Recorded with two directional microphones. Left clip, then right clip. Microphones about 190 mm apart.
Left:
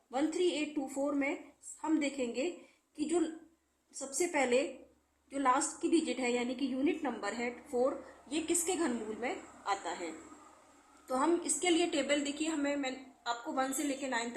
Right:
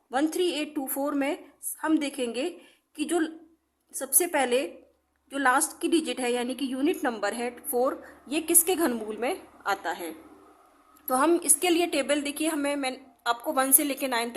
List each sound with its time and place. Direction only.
0.1 s a woman's voice: 45° right (ahead or behind)
11.1 s a woman's voice: 45° right (ahead or behind)